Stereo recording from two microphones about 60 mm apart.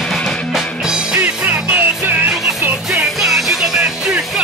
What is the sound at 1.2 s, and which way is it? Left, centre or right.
Music, right.